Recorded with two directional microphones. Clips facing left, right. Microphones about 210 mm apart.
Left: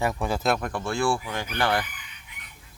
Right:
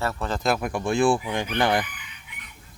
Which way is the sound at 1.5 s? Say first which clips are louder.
Right 2 dB; 15° right (ahead or behind).